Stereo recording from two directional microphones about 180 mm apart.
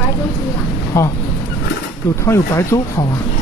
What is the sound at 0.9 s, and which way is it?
Speech, 15° left (ahead or behind).